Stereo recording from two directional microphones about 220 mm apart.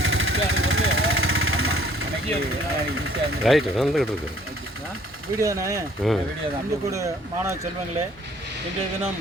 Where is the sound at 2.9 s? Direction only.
70° right (ahead or behind).